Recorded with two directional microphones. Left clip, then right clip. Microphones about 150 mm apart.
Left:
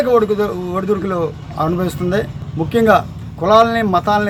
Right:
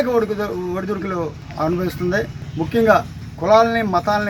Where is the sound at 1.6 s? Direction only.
30° left (ahead or behind).